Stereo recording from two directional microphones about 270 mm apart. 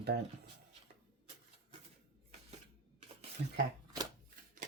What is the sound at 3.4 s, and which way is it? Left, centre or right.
Speech, right.